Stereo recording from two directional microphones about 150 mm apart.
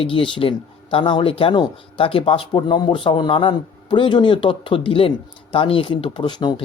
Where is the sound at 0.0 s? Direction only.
35° left (ahead or behind).